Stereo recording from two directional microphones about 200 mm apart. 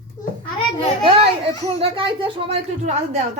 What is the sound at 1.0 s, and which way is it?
Children playing, 25° right (ahead or behind).